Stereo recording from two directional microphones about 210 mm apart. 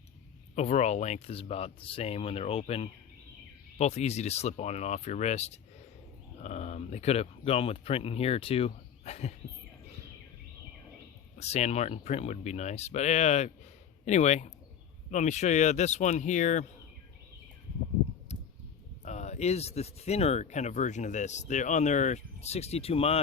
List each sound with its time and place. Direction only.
0.5 s speech: 30° left (ahead or behind)
11.3 s speech: 30° left (ahead or behind)
18.3 s a sound: 30° left (ahead or behind)
19.0 s speech: 35° left (ahead or behind)